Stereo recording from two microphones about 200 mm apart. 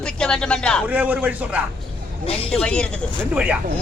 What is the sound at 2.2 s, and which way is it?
Speech, 30° left (ahead or behind).